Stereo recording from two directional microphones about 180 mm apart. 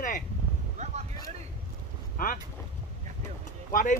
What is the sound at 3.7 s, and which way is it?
Speech, 50° left (ahead or behind).